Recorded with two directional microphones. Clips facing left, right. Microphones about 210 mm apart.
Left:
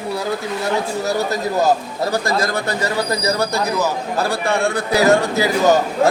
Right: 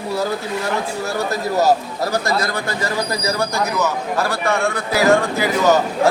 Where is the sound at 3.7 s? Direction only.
35° left (ahead or behind).